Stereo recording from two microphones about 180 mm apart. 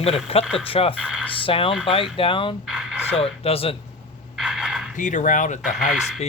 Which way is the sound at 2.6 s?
5° right (ahead or behind).